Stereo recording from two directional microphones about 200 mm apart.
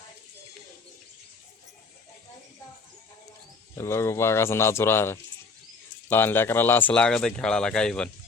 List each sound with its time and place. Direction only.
3.8 s speech: 15° left (ahead or behind)